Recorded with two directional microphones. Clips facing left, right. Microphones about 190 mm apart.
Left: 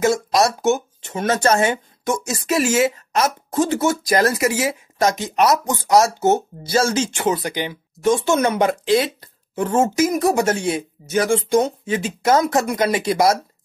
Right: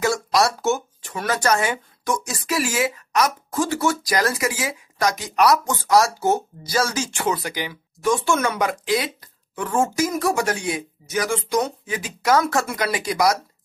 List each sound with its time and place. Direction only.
0.0 s speech: 20° left (ahead or behind)